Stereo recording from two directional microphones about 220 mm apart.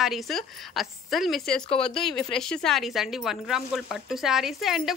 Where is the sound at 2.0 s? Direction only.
Centre (ahead or behind).